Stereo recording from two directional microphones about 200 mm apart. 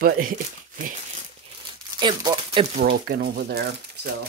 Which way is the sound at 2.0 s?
25° right (ahead or behind).